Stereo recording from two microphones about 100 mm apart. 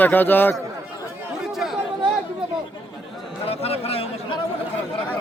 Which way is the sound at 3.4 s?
80° left.